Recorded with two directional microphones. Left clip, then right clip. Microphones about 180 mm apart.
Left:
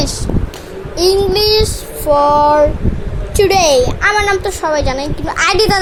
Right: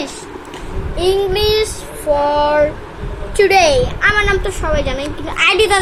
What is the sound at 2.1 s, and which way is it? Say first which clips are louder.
Speech: left 4 dB; 30° left (ahead or behind).